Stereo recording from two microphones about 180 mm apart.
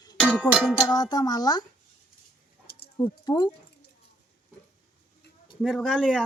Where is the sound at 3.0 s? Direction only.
20° left (ahead or behind).